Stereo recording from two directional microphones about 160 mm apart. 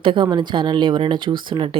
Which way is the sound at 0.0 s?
30° right (ahead or behind).